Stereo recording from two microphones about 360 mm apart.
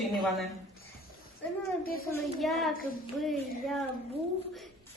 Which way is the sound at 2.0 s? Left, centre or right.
Centre.